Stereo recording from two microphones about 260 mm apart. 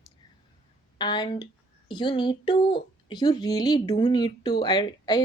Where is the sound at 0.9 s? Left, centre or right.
Centre.